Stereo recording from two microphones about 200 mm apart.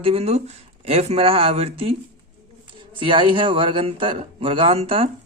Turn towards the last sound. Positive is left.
turn(degrees=-30)  # may be behind; listen again after turning